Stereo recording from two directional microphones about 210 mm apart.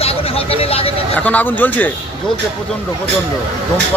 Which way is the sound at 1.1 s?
10° left (ahead or behind).